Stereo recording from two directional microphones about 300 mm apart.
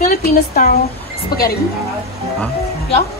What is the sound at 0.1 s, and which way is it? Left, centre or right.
Speech, left.